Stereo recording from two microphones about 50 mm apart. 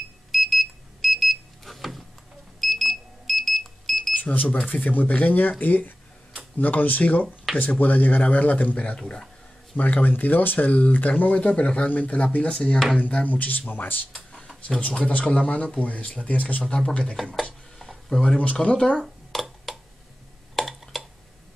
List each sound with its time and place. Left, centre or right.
0.3 s alarm: centre
4.2 s speech: left
7.5 s speech: centre
7.8 s speech: left
9.0 s speech: centre
10.0 s speech: left
11.5 s speech: left
14.1 s a sound: centre
15.0 s speech: left
16.6 s speech: centre
17.3 s a sound: centre
18.4 s speech: left
19.3 s a sound: centre